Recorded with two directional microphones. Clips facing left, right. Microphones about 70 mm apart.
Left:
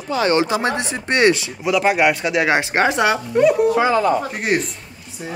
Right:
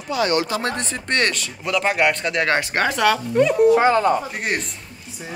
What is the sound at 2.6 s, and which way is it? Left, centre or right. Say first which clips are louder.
Speech: left 3 dB; left.